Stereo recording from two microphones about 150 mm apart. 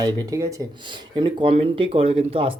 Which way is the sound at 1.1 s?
35° right (ahead or behind).